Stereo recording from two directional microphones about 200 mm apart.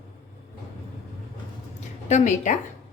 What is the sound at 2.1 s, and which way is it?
Speech, 35° left (ahead or behind).